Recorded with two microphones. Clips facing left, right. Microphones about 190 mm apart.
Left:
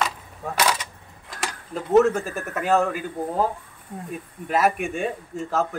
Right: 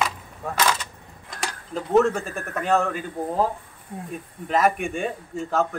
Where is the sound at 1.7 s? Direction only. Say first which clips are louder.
Left 2 dB; 5° left (ahead or behind).